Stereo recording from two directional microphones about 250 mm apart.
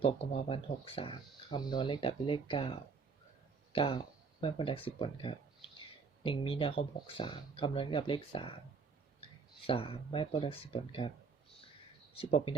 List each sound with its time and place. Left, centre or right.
0.0 s speech: left
12.1 s speech: left